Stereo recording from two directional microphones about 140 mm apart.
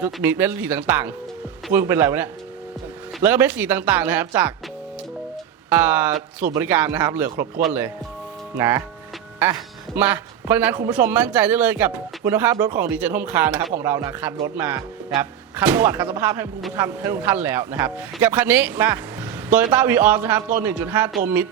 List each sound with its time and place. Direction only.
0.0 s speech: 15° right (ahead or behind)
5.6 s speech: 15° right (ahead or behind)